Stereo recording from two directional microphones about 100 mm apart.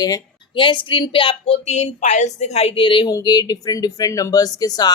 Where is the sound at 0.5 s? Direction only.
55° left (ahead or behind); by 1.7 s 70° left (ahead or behind).